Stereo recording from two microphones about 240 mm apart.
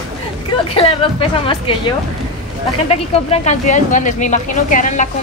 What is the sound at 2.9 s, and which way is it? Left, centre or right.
Speech, left.